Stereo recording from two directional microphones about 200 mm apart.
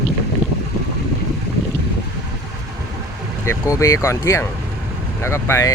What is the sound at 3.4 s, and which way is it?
Speech, 15° left (ahead or behind).